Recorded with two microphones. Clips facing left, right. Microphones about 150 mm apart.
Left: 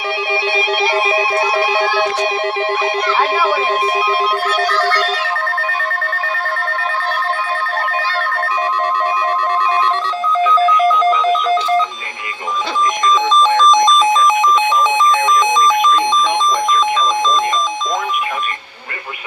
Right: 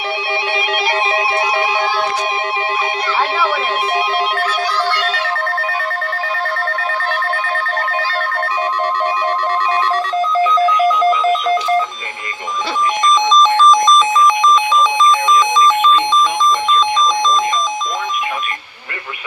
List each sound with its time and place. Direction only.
1.5 s music: 45° left (ahead or behind)
4.4 s telephone bell ringing: 55° left (ahead or behind)
10.8 s ringtone: 10° right (ahead or behind)
13.2 s telephone bell ringing: 15° left (ahead or behind)
13.8 s radio: 30° left (ahead or behind)
15.4 s alarm: 20° left (ahead or behind)